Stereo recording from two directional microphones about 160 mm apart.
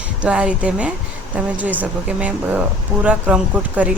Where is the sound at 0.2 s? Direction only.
5° right (ahead or behind).